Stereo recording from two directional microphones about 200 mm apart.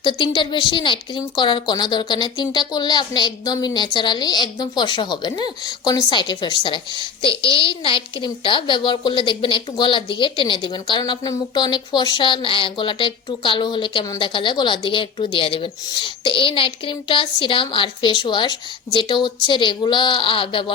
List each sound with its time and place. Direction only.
0.0 s a woman's voice: 25° left (ahead or behind)